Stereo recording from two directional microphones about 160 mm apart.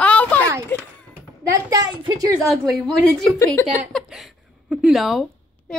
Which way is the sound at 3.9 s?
5° right (ahead or behind).